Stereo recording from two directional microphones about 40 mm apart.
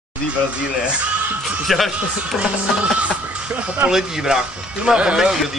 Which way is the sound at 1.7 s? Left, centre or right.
Centre.